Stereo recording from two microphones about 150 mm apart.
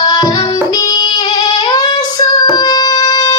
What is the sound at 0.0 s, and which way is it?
Music, 25° left (ahead or behind).